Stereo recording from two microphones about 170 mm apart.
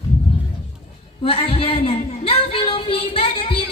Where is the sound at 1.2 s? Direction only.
35° left (ahead or behind).